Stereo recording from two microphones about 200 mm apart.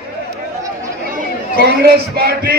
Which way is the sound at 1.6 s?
55° right (ahead or behind).